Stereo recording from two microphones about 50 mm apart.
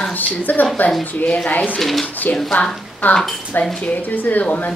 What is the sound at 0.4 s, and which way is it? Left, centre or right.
A woman's voice, left.